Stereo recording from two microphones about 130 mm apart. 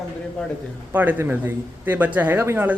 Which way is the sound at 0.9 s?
15° right (ahead or behind).